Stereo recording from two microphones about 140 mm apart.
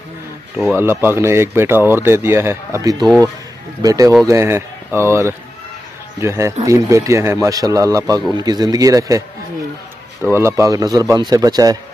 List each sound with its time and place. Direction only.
0.7 s speech: 15° right (ahead or behind)
10.3 s speech: 20° right (ahead or behind)